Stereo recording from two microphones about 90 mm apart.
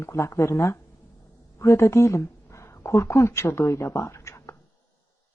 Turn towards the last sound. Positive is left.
turn(degrees=30)  # may be behind; listen again after turning